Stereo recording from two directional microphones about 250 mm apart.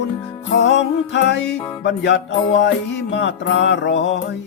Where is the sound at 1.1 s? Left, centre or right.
Left.